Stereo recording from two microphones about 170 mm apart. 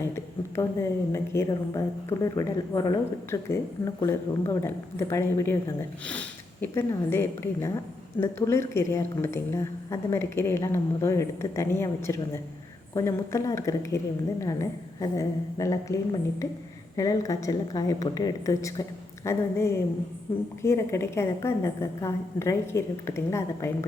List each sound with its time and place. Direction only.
0.5 s a woman's voice: 15° left (ahead or behind)